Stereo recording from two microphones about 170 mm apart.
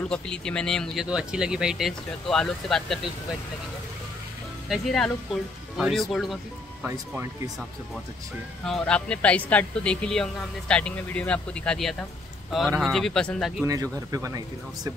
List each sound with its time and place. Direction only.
0.1 s speech: 5° left (ahead or behind)
4.6 s speech: centre (ahead or behind)
6.9 s speech: 15° right (ahead or behind)
8.6 s speech: 5° left (ahead or behind)
13.7 s speech: 20° right (ahead or behind)